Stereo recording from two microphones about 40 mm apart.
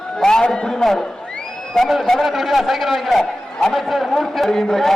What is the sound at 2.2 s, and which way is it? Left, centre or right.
A man's voice, centre.